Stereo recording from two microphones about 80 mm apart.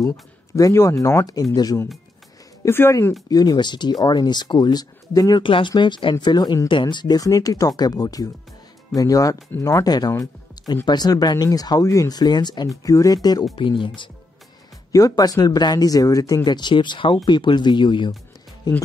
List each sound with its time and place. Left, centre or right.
0.6 s speech: left
2.9 s speech: left
3.3 s speech: left
5.4 s speech: left
6.7 s speech: left
7.2 s speech: left
12.6 s speech: left
13.6 s speech: left
14.9 s speech: left
16.4 s speech: left
18.7 s speech: left